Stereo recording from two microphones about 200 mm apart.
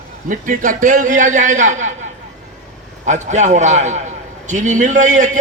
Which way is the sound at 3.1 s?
35° right (ahead or behind).